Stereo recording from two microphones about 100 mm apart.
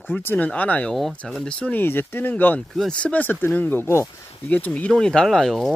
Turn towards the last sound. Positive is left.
turn(degrees=5)  # may be behind; listen again after turning